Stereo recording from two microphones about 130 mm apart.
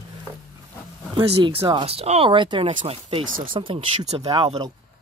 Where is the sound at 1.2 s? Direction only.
45° right (ahead or behind).